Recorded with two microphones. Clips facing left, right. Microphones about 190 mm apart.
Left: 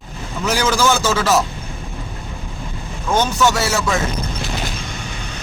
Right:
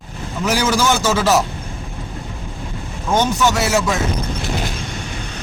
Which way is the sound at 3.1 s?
15° right (ahead or behind).